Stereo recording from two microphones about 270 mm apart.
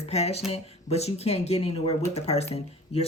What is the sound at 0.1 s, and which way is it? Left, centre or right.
Speech, left.